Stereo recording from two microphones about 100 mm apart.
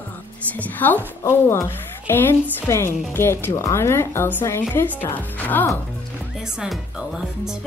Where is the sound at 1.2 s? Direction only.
30° left (ahead or behind).